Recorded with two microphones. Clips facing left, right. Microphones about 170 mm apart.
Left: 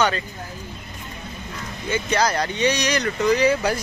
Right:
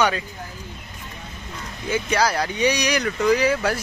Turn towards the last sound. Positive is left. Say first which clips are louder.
# left 1 dB
turn(degrees=0)  # may be behind; listen again after turning